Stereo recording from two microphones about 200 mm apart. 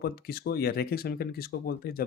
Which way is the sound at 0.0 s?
50° left (ahead or behind).